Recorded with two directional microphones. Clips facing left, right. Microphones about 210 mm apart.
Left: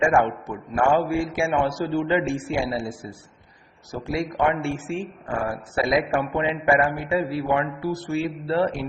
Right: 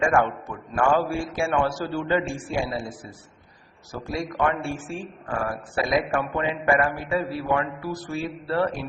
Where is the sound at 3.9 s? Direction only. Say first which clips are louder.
Left 3 dB; 25° left (ahead or behind).